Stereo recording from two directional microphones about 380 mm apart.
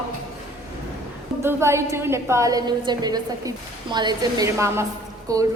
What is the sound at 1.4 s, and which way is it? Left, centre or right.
A woman's voice, centre.